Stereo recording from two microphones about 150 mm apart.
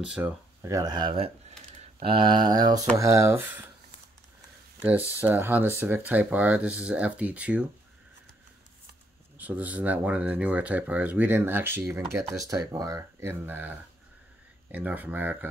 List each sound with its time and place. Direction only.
0.0 s speech: 5° right (ahead or behind)
0.6 s speech: 20° right (ahead or behind)
4.8 s speech: 10° right (ahead or behind)
9.4 s speech: 10° right (ahead or behind)